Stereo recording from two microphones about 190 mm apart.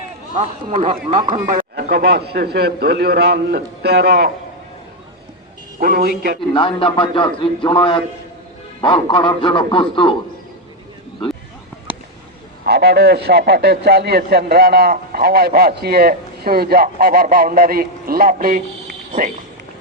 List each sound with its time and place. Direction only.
0.3 s speech: 35° right (ahead or behind)
1.7 s a man's voice: 60° right (ahead or behind)
5.8 s a man's voice: 55° right (ahead or behind)
6.5 s a man's voice: 25° left (ahead or behind)
12.6 s a man's voice: 60° right (ahead or behind)